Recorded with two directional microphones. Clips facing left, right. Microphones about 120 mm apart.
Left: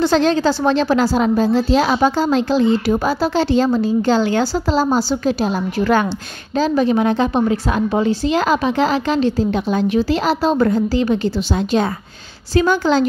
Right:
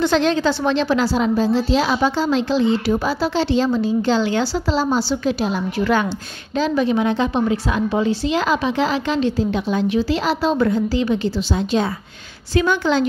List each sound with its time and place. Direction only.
0.0 s a woman's voice: 35° left (ahead or behind)
12.5 s a woman's voice: 40° left (ahead or behind)